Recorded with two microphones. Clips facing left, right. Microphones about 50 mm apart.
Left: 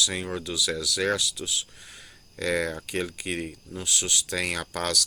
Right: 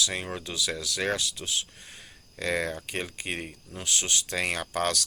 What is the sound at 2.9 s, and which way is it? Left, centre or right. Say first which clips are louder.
Speech: left 3 dB; right.